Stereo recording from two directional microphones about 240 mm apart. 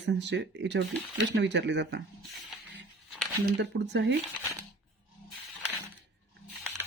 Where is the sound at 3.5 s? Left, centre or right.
Right.